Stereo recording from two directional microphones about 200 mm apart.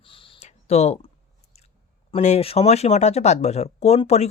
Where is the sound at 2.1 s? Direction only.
35° left (ahead or behind).